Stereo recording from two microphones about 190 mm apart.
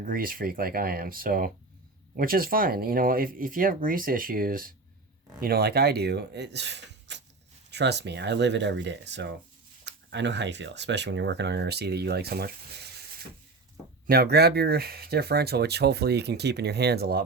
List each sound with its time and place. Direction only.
0.0 s speech: 50° right (ahead or behind)
14.1 s speech: 55° right (ahead or behind)